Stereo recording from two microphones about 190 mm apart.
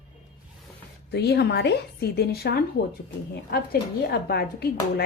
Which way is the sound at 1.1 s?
60° left (ahead or behind).